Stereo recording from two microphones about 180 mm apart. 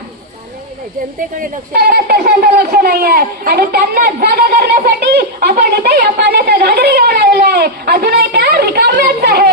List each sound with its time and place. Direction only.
1.4 s speech: 60° right (ahead or behind)